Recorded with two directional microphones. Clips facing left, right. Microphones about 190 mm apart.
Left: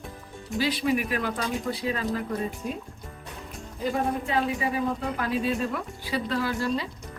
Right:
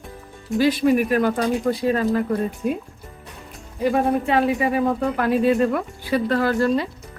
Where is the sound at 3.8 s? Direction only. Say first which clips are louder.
Right 8 dB; 70° right (ahead or behind).